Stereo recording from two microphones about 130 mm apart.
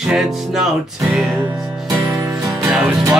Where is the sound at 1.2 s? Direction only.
20° right (ahead or behind).